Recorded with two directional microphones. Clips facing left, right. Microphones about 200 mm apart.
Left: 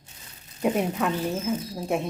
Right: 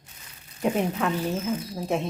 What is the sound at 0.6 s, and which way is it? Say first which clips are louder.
Speech: even; 5° left (ahead or behind).